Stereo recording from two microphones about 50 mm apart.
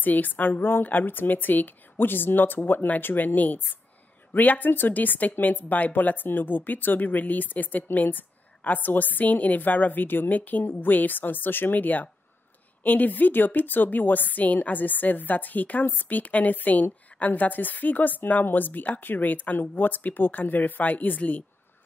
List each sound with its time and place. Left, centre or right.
0.0 s a woman's voice: left